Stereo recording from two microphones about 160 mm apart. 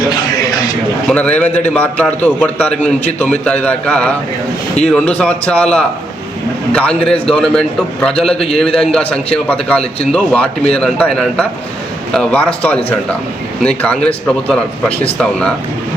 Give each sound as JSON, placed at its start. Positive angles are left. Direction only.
{"t": 0.1, "sound": "a sound", "side_deg": 25}
{"t": 1.0, "sound": "a man's voice", "side_deg": 10}
{"t": 6.7, "sound": "a man's voice", "side_deg": 5}